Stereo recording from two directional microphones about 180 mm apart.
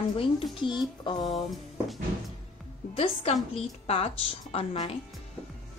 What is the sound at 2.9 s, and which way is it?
Speech, 30° left (ahead or behind).